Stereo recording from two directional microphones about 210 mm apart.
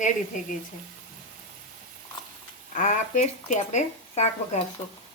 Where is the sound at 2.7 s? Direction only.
40° left (ahead or behind).